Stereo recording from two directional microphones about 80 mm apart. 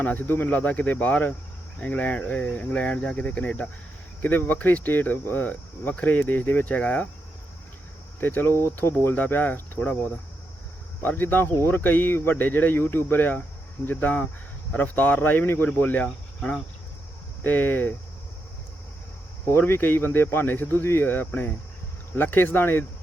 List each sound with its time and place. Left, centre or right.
0.0 s speech: left
8.2 s speech: left
11.0 s speech: left
17.4 s speech: left
19.5 s speech: left